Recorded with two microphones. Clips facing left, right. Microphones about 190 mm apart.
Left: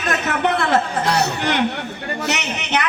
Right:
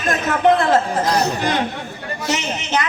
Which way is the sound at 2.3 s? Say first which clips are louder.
Right 3 dB; 70° left (ahead or behind).